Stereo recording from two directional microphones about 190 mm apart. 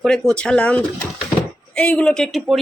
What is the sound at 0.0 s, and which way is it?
Speech, centre (ahead or behind).